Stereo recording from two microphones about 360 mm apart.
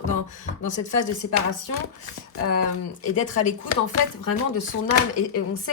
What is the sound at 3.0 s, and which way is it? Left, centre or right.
Speech, centre.